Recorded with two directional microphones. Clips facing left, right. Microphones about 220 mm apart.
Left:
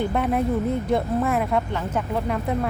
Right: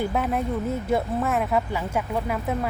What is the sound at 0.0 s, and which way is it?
Speech, centre (ahead or behind).